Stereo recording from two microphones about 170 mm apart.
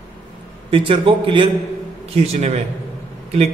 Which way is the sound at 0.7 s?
30° right (ahead or behind).